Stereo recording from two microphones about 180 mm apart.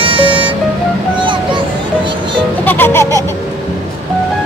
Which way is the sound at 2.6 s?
10° left (ahead or behind).